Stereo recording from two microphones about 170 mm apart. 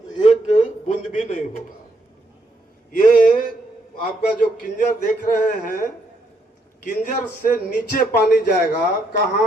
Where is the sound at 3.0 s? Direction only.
55° left (ahead or behind).